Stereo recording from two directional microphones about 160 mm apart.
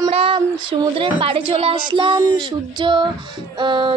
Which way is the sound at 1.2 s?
35° right (ahead or behind).